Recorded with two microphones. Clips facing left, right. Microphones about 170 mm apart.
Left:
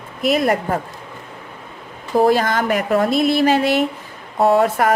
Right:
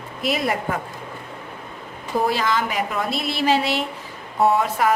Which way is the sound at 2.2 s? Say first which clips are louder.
Left 6 dB; 50° left (ahead or behind).